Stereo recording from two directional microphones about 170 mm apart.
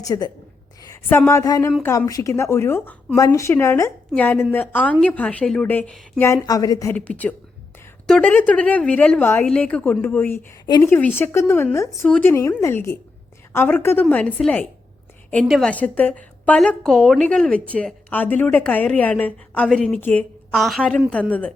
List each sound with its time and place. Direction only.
0.0 s a woman's voice: 20° left (ahead or behind)
0.8 s a sound: 20° left (ahead or behind)
1.3 s a woman's voice: 20° left (ahead or behind)
6.9 s a woman's voice: 10° left (ahead or behind)